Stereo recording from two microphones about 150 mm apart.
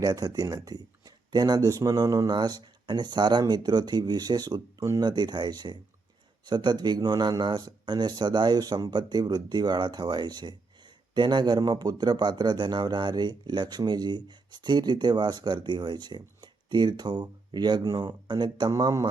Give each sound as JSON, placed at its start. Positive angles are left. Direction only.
{"t": 0.0, "sound": "speech", "side_deg": -25}